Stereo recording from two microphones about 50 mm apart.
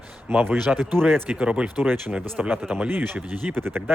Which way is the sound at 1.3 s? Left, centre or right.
Right.